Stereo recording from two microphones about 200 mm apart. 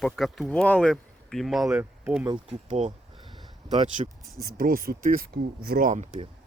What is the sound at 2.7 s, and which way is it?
Speech, 35° right (ahead or behind).